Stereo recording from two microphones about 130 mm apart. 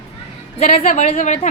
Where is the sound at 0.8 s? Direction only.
70° left (ahead or behind).